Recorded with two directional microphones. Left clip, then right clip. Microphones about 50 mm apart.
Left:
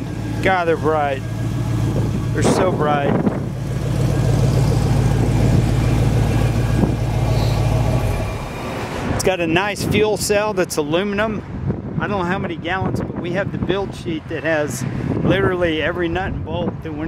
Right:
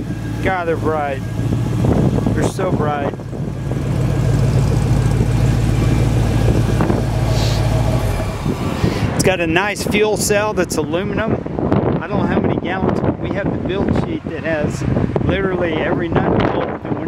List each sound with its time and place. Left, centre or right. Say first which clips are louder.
0.5 s speech: left 2 dB; left
2.3 s speech: left 2 dB; left
9.2 s speech: right 2 dB; centre
10.9 s speech: left 1 dB; left
12.1 s speech: right 3 dB; left
15.2 s speech: left 4 dB; left